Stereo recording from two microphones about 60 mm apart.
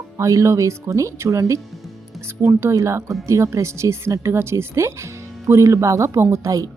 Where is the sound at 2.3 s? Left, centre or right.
Right.